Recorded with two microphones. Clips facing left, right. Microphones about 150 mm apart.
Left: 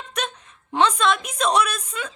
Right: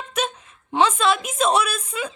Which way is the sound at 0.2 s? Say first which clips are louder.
Right 4 dB; 5° right (ahead or behind).